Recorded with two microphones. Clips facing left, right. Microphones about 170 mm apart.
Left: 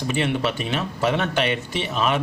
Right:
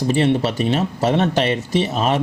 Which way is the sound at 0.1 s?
35° right (ahead or behind).